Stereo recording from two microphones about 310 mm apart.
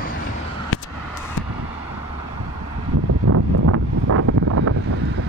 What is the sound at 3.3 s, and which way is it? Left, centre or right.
Wind noise, right.